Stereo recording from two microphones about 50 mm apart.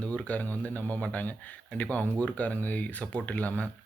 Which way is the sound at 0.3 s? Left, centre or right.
Left.